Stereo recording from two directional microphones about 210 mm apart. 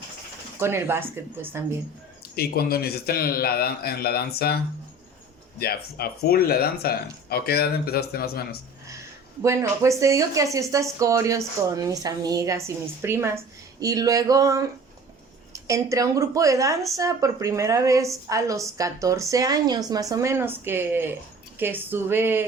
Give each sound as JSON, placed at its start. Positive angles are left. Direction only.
{"t": 0.6, "sound": "speech", "side_deg": -10}
{"t": 2.3, "sound": "a man's voice", "side_deg": 45}
{"t": 9.4, "sound": "speech", "side_deg": -15}